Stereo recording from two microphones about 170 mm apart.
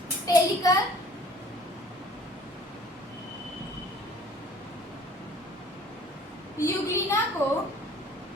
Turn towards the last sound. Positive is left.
turn(degrees=15)  # may be behind; listen again after turning